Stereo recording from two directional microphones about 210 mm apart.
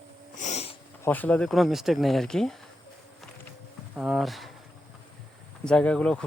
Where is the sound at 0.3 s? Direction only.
35° left (ahead or behind).